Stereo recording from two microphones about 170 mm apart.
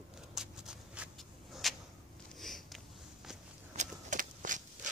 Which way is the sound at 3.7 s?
50° right (ahead or behind).